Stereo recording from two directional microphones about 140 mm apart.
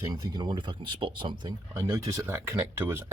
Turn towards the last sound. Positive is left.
turn(degrees=-15)  # may be behind; listen again after turning